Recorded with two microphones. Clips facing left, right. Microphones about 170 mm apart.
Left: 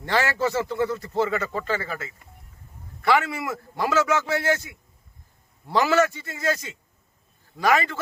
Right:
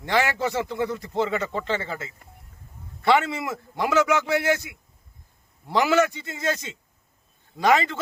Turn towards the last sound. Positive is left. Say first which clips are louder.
# right 1 dB
turn(degrees=-20)  # may be behind; listen again after turning